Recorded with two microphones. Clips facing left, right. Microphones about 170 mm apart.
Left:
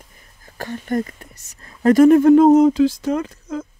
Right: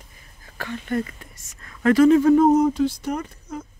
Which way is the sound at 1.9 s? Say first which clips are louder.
Left 4 dB; 50° left (ahead or behind).